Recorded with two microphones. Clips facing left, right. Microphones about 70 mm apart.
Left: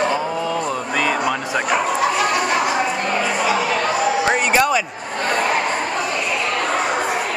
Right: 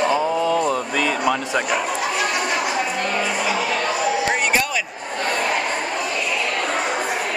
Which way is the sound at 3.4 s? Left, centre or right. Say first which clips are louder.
Left 3 dB; centre.